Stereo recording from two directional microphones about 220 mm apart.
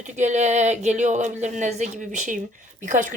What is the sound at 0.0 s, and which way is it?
A woman's voice, 35° right (ahead or behind).